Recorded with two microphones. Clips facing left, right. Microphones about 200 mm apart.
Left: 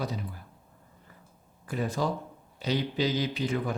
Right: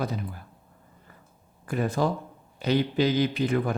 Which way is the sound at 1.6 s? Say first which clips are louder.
Right 4 dB; 55° right (ahead or behind).